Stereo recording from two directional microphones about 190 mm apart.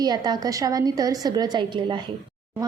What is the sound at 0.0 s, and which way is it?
A woman's voice, 20° right (ahead or behind).